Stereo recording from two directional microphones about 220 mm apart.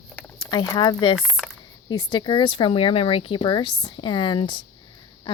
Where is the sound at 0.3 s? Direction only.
20° left (ahead or behind).